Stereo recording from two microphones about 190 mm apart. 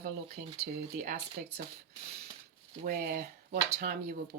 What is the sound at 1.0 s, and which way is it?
Speech, 45° right (ahead or behind).